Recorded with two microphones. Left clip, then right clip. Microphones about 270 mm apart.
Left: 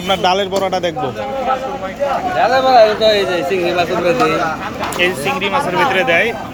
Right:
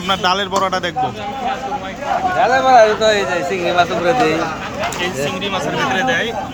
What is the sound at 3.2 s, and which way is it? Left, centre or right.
Speech, centre.